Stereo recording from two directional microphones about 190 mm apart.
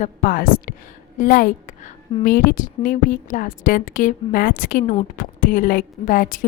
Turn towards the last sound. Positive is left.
turn(degrees=45)  # may be behind; listen again after turning